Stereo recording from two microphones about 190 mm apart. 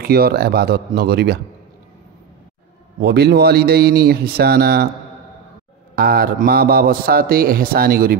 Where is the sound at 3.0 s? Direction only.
60° right (ahead or behind).